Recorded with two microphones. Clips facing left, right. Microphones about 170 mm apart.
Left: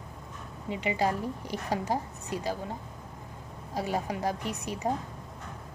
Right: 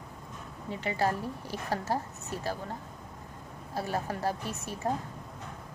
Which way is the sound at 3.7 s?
15° left (ahead or behind).